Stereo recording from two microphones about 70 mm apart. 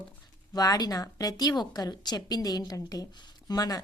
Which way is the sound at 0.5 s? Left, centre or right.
Left.